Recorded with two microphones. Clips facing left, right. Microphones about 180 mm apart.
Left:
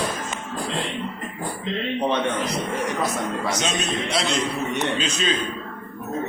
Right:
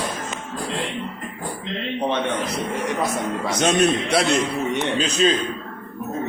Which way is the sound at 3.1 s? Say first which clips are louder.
Right 2 dB; 60° right (ahead or behind).